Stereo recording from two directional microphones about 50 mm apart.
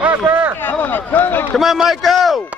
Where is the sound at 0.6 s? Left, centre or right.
Left.